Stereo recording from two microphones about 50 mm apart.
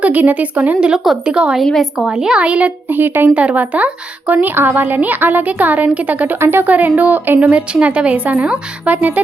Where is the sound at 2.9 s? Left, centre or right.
Right.